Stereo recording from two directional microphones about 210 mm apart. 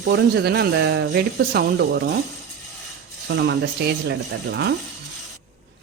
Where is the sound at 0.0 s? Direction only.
55° right (ahead or behind).